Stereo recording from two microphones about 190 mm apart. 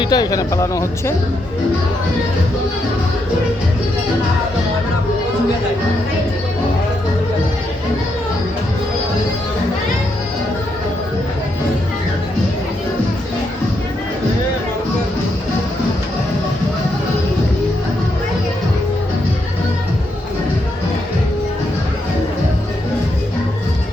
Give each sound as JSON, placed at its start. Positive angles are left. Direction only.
{"t": 0.0, "sound": "speech", "side_deg": 20}